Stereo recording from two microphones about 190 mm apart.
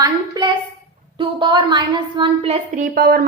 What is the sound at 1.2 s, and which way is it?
A woman's voice, 25° right (ahead or behind).